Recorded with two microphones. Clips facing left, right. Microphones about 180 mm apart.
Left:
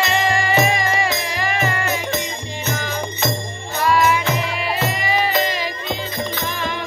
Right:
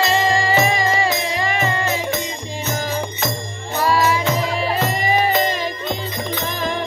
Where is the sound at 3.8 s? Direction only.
35° right (ahead or behind).